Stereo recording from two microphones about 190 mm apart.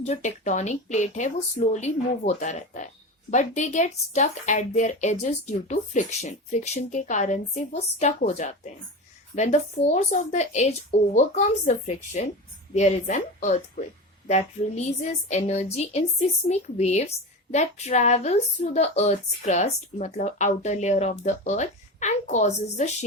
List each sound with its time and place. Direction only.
0.0 s speech: 35° left (ahead or behind)
15.3 s speech: 35° left (ahead or behind)